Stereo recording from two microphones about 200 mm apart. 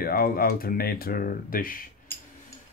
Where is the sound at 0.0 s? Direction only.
50° left (ahead or behind).